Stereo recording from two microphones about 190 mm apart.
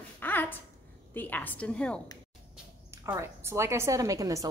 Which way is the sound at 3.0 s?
15° right (ahead or behind).